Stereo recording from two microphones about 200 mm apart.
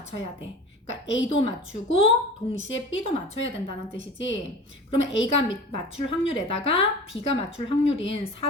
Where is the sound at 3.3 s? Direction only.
70° left (ahead or behind).